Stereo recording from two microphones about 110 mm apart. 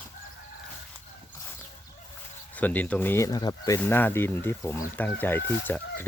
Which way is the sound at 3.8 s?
15° left (ahead or behind).